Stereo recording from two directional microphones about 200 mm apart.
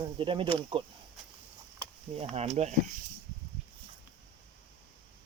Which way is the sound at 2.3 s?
30° right (ahead or behind).